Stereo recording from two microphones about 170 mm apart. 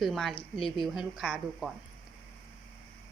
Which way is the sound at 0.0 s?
Centre (ahead or behind).